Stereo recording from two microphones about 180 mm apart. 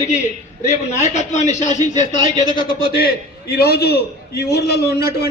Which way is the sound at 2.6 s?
55° left (ahead or behind).